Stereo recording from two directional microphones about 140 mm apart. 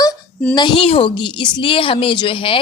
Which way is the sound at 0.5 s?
35° left (ahead or behind).